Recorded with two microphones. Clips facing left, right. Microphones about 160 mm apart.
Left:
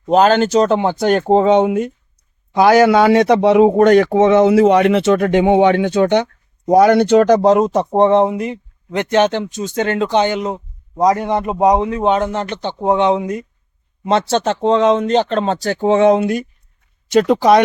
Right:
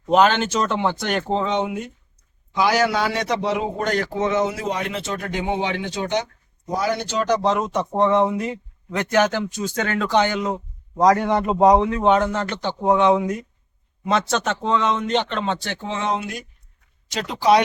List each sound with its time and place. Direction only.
0.1 s a man's voice: 40° left (ahead or behind); by 7.3 s 60° left (ahead or behind)
7.4 s speech: 40° left (ahead or behind)
15.9 s speech: 55° left (ahead or behind)